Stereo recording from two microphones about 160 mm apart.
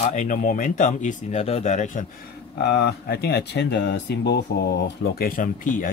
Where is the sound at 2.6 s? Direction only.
90° left; by 5.9 s 55° left (ahead or behind).